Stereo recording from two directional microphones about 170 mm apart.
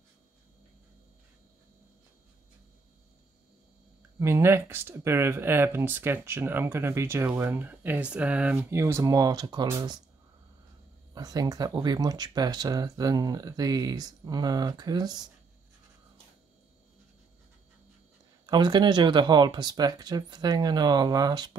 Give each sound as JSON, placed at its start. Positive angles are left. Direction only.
{"t": 4.2, "sound": "speech", "side_deg": -15}
{"t": 11.1, "sound": "speech", "side_deg": -20}
{"t": 18.5, "sound": "speech", "side_deg": -25}